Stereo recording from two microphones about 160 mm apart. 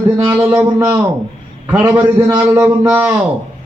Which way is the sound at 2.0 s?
20° right (ahead or behind).